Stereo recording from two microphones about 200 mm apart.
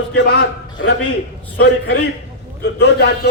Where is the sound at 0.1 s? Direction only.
65° left (ahead or behind).